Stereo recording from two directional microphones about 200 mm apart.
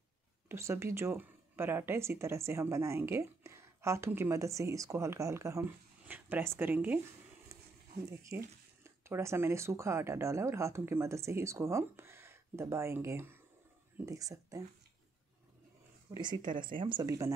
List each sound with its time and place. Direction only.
0.5 s a woman's voice: 15° right (ahead or behind)
8.2 s a woman's voice: 15° right (ahead or behind)
16.1 s speech: 20° right (ahead or behind)